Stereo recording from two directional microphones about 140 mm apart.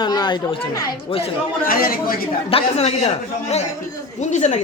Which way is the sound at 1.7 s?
90° left.